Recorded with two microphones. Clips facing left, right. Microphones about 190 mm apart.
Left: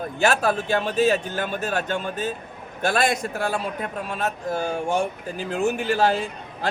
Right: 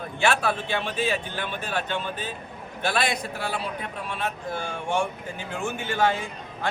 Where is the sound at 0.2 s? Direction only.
40° left (ahead or behind).